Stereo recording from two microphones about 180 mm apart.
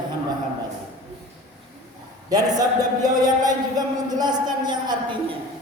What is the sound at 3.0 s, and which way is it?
A man's voice, 20° right (ahead or behind).